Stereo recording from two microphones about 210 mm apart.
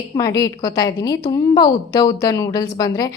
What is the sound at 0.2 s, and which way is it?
A woman's voice, 15° left (ahead or behind).